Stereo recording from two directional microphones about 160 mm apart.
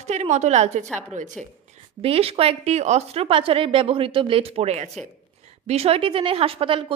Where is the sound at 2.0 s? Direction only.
40° right (ahead or behind).